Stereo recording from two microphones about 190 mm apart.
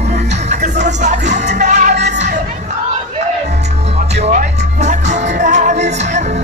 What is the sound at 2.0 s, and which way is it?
Crowd, 40° right (ahead or behind).